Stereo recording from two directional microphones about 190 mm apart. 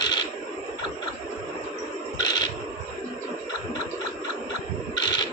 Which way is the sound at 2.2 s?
20° left (ahead or behind).